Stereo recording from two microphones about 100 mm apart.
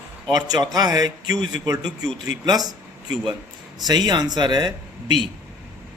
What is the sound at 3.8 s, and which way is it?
Speech, 45° right (ahead or behind).